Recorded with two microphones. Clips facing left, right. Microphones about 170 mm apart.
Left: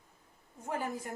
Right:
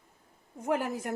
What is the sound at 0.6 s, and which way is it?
Speech, 85° right.